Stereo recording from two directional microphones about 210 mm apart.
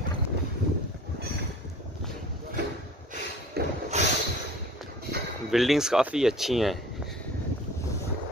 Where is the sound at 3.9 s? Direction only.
35° right (ahead or behind).